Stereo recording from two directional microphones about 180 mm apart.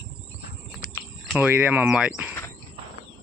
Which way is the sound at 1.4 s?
10° right (ahead or behind).